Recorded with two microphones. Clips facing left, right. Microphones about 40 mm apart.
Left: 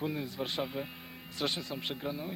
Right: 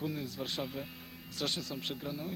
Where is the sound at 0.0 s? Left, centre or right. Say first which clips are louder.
Left 3 dB; left.